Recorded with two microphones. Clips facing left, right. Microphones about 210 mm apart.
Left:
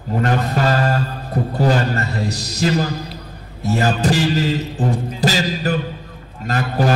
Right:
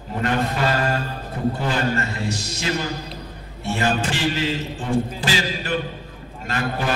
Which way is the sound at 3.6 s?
40° left (ahead or behind).